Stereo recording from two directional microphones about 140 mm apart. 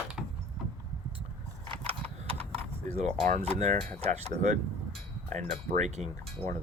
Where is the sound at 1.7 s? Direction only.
40° right (ahead or behind).